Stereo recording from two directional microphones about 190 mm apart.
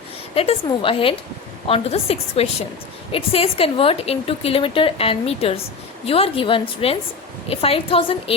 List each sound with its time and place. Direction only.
0.3 s a woman's voice: 30° left (ahead or behind)